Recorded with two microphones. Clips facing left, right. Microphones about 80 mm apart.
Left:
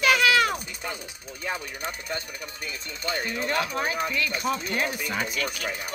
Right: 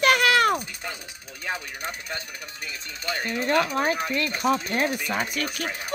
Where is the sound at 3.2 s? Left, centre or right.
Right.